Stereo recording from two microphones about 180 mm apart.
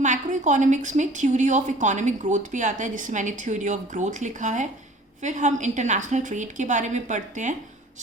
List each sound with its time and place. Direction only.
0.0 s a woman's voice: 45° right (ahead or behind)